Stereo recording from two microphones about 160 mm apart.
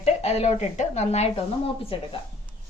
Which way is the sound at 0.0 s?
40° left (ahead or behind).